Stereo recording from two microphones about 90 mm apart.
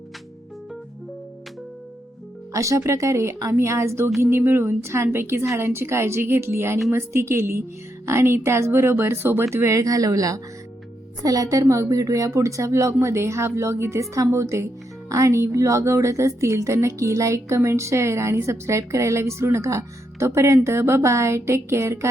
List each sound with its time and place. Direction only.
2.5 s a woman's voice: 35° right (ahead or behind)